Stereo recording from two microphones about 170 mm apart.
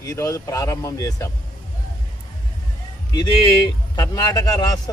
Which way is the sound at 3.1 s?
25° left (ahead or behind).